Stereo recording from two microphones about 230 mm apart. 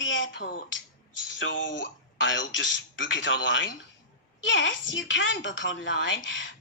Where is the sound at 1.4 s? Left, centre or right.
Left.